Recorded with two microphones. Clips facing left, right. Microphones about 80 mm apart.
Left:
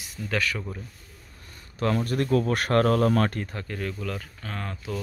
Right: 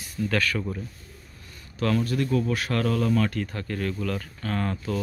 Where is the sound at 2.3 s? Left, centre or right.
Left.